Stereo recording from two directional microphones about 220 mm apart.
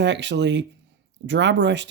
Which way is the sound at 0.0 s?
55° right (ahead or behind).